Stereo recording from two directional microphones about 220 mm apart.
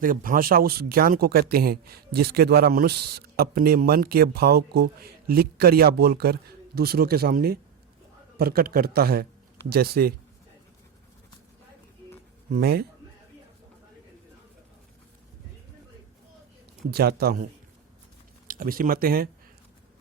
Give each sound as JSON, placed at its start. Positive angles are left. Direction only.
{"t": 0.0, "sound": "speech", "side_deg": -40}
{"t": 12.5, "sound": "speech", "side_deg": -45}
{"t": 16.9, "sound": "speech", "side_deg": -45}
{"t": 18.4, "sound": "speech", "side_deg": -40}